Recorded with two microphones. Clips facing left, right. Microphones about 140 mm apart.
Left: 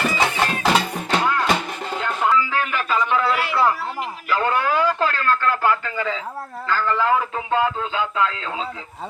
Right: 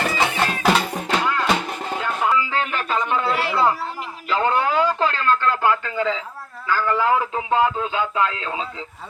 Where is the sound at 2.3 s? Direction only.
20° right (ahead or behind).